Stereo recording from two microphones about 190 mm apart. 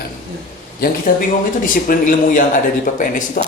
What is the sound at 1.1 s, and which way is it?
Speech, 45° left (ahead or behind).